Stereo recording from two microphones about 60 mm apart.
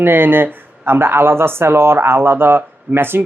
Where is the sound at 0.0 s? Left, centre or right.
Right.